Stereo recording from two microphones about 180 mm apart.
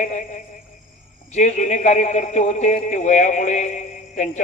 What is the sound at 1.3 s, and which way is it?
A man's voice, 40° left (ahead or behind).